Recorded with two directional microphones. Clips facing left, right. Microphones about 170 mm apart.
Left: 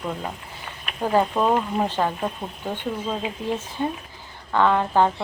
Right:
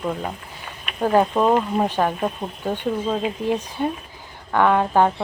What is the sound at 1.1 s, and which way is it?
Speech, 10° right (ahead or behind).